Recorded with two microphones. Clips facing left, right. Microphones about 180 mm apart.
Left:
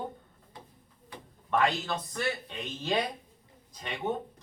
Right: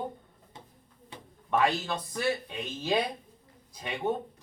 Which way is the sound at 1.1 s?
25° right (ahead or behind).